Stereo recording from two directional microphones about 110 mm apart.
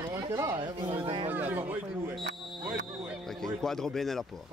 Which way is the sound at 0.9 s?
55° right (ahead or behind).